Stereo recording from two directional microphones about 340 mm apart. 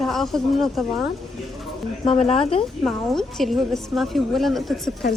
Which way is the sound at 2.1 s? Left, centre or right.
Centre.